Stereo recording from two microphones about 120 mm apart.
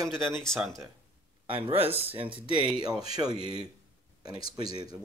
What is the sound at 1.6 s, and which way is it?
Speech, 55° right (ahead or behind).